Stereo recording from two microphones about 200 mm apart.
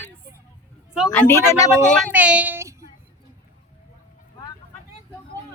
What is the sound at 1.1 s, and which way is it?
Speech, 10° left (ahead or behind).